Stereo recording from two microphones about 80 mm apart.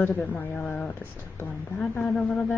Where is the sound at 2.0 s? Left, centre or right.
Centre.